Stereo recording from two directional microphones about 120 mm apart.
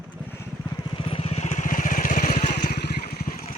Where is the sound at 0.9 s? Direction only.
50° left (ahead or behind); by 2.6 s 90° left.